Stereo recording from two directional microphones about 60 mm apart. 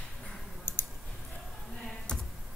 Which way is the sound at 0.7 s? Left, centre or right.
Left.